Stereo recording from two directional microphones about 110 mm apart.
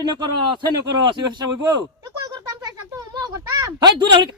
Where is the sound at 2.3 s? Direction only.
35° right (ahead or behind).